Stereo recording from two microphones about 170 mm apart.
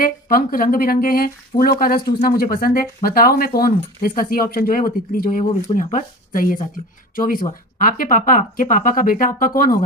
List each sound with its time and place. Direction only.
0.0 s speech: 60° left (ahead or behind)